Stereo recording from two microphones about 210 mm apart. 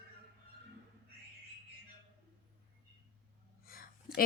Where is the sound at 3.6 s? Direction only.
45° left (ahead or behind).